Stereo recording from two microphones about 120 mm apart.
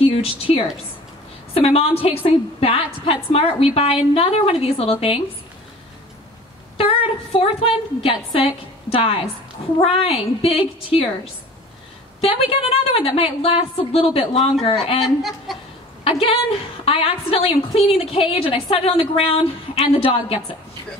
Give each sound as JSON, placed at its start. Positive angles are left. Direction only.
{"t": 0.0, "sound": "a woman's voice", "side_deg": 50}
{"t": 6.8, "sound": "a woman's voice", "side_deg": 55}
{"t": 12.2, "sound": "a woman's voice", "side_deg": 55}
{"t": 15.5, "sound": "speech", "side_deg": 0}
{"t": 16.0, "sound": "a woman's voice", "side_deg": 50}